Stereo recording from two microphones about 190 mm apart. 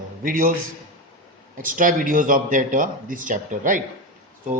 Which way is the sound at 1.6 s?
45° right (ahead or behind).